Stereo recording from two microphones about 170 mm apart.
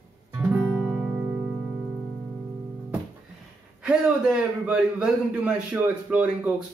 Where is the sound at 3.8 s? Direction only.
5° right (ahead or behind).